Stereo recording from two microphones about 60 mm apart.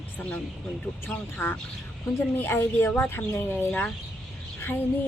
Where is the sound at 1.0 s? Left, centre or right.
Left.